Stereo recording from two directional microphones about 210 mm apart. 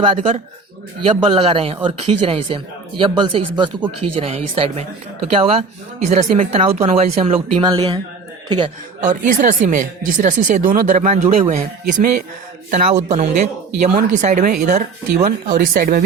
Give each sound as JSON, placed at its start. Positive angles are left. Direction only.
{"t": 0.0, "sound": "speech", "side_deg": -25}
{"t": 9.0, "sound": "speech", "side_deg": -35}